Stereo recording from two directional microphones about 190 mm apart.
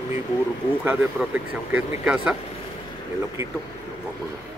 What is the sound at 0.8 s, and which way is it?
Speech, 5° right (ahead or behind).